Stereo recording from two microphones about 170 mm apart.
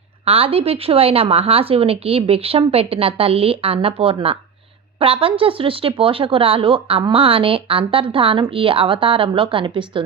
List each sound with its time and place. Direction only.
0.3 s speech: 35° right (ahead or behind)